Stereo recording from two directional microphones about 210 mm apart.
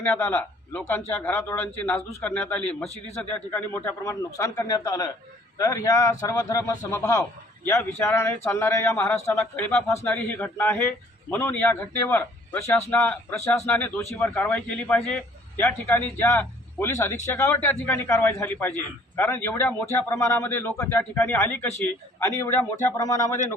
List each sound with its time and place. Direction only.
0.1 s a man's voice: 10° left (ahead or behind)